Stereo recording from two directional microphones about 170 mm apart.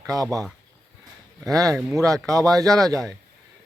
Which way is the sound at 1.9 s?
20° right (ahead or behind).